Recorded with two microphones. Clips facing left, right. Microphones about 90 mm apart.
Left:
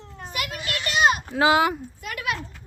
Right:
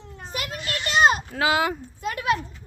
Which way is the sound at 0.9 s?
35° right (ahead or behind).